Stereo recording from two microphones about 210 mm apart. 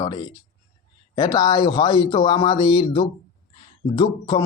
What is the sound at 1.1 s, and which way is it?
Speech, 20° left (ahead or behind).